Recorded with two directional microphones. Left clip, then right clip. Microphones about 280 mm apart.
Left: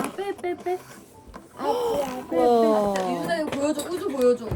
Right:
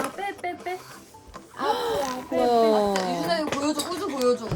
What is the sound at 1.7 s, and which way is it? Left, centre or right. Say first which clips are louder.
Speech: left 2 dB; right.